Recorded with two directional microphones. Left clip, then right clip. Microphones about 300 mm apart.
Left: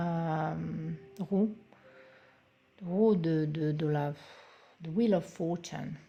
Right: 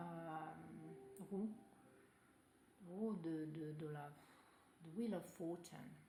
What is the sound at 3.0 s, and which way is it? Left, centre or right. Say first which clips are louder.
Speech: left 19 dB; left.